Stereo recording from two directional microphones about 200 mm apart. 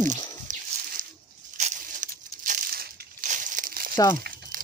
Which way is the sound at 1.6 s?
40° right (ahead or behind).